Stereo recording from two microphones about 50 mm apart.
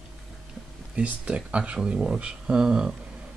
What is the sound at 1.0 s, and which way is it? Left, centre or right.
Speech, right.